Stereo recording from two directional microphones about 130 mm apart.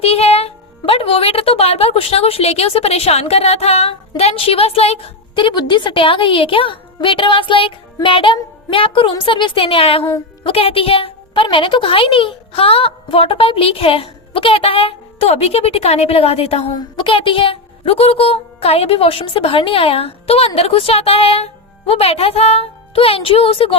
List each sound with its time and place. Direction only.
0.0 s a woman's voice: 50° left (ahead or behind)